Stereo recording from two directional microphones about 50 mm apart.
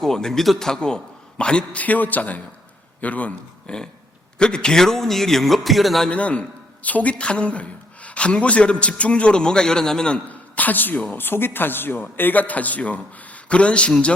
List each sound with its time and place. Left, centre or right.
0.0 s a man's voice: centre
0.8 s a man's voice: centre
1.8 s a woman's voice: left; by 6.1 s centre
6.1 s a woman's voice: left
10.2 s a sound: left
11.2 s speech: left